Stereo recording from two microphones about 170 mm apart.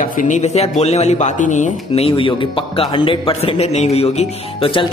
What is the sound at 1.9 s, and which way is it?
A man's voice, 35° left (ahead or behind).